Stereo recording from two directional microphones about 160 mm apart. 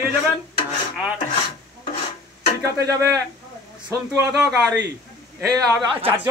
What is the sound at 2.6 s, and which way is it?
Speech, 20° right (ahead or behind).